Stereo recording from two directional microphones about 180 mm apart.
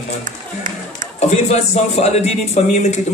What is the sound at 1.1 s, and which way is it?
Speech, 40° left (ahead or behind).